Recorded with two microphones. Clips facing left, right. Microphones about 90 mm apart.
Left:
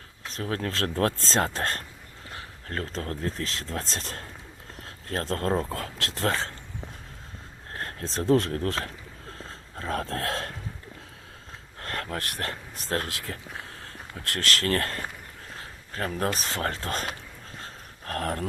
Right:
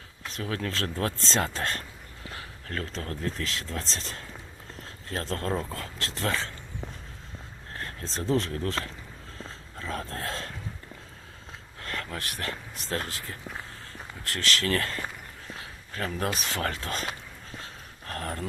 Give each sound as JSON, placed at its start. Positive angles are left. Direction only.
{"t": 0.3, "sound": "speech", "side_deg": 35}
{"t": 0.8, "sound": "speech", "side_deg": 50}
{"t": 5.7, "sound": "speech", "side_deg": 60}
{"t": 6.1, "sound": "speech", "side_deg": 40}
{"t": 7.8, "sound": "speech", "side_deg": 55}
{"t": 9.5, "sound": "a sound", "side_deg": 50}
{"t": 10.0, "sound": "dog", "side_deg": 70}
{"t": 11.8, "sound": "a sound", "side_deg": 50}
{"t": 12.1, "sound": "speech", "side_deg": 50}
{"t": 13.1, "sound": "speech", "side_deg": 90}
{"t": 14.3, "sound": "speech", "side_deg": 50}
{"t": 17.6, "sound": "a sound", "side_deg": 50}